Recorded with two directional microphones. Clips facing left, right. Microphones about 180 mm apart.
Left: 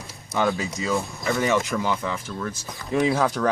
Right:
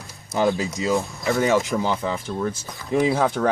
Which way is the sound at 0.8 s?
20° right (ahead or behind).